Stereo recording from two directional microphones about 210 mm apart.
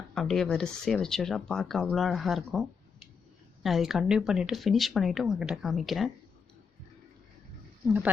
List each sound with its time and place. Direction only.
0.1 s speech: 5° left (ahead or behind)